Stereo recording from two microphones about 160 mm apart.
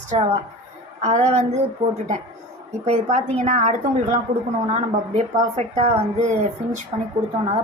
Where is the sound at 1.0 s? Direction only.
45° right (ahead or behind).